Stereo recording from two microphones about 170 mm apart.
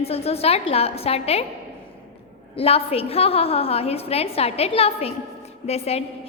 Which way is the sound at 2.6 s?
35° left (ahead or behind).